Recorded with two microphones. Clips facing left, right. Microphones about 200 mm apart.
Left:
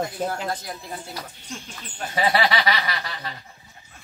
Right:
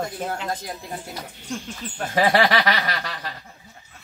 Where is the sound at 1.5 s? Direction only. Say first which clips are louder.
Right 6 dB; 55° right (ahead or behind).